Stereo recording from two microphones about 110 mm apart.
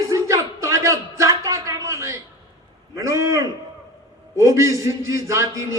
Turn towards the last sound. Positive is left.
turn(degrees=-25)  # may be behind; listen again after turning